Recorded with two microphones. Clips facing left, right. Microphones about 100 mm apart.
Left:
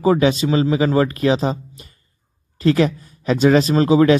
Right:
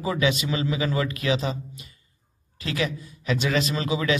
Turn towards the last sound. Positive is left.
turn(degrees=40)  # may be behind; listen again after turning